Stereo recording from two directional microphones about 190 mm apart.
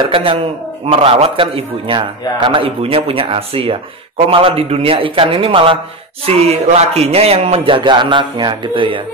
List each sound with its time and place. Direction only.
0.0 s a man's voice: 30° right (ahead or behind)